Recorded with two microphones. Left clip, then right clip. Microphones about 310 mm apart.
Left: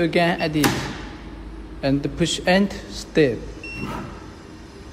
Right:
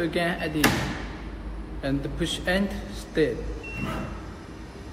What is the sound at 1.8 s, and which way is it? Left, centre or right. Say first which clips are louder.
A man's voice: left 7 dB; centre.